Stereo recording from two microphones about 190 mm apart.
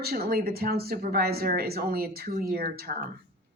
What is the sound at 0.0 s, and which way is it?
Speech, 55° right (ahead or behind).